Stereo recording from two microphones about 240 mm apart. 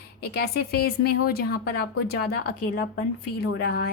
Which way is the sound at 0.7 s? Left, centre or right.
Left.